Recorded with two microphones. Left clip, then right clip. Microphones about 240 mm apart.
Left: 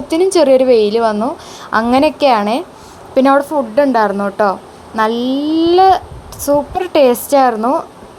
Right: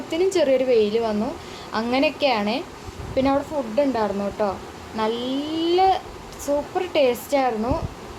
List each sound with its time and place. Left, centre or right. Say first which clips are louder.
0.1 s a woman's voice: left 10 dB; left